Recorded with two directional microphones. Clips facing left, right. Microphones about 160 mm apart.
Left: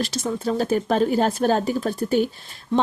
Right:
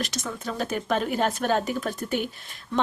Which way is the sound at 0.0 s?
30° left (ahead or behind).